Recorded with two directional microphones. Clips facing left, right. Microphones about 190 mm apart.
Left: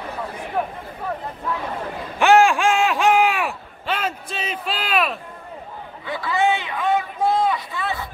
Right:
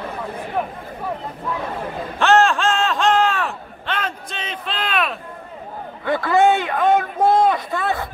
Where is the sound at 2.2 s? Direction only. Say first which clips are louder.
Left 1 dB; 10° left (ahead or behind).